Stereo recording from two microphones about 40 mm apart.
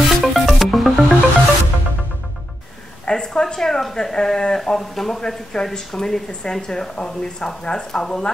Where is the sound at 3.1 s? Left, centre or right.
Centre.